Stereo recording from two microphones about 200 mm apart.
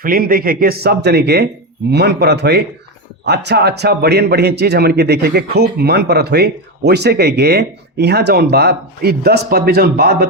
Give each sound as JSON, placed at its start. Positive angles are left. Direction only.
{"t": 0.0, "sound": "a man's voice", "side_deg": -45}